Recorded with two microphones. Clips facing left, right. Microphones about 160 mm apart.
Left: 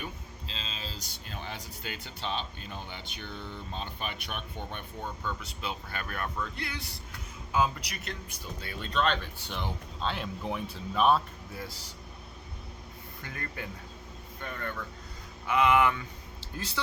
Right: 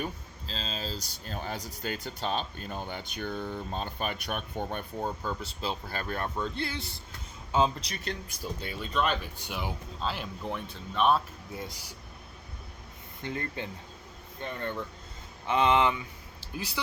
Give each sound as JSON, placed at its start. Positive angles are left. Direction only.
{"t": 0.0, "sound": "speech", "side_deg": -40}
{"t": 8.8, "sound": "speech", "side_deg": -10}
{"t": 11.5, "sound": "speech", "side_deg": -20}
{"t": 13.2, "sound": "speech", "side_deg": -25}